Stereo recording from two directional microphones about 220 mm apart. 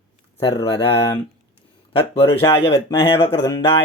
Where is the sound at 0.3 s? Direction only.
25° left (ahead or behind).